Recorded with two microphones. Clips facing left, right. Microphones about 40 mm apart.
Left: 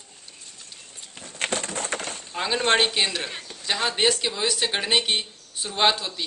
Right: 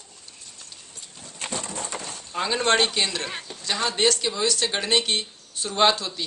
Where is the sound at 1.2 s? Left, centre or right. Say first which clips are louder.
Left 5 dB; left.